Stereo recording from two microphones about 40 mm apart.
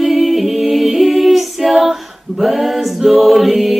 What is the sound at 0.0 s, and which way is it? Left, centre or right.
A capella, centre.